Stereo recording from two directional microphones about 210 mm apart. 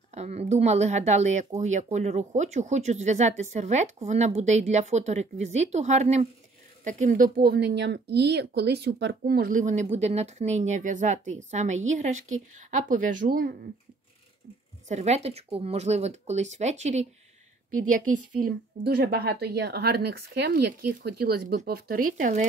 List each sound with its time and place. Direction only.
0.1 s speech: 30° right (ahead or behind)
14.9 s speech: 30° right (ahead or behind)
17.8 s a woman's voice: 40° right (ahead or behind)